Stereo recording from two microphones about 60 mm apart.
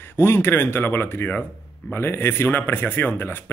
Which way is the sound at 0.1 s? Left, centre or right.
Left.